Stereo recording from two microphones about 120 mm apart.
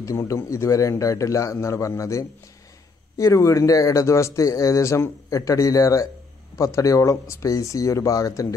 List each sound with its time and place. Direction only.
0.0 s speech: 25° left (ahead or behind)